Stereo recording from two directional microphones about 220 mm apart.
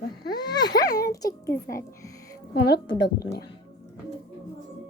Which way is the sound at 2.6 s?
50° left (ahead or behind).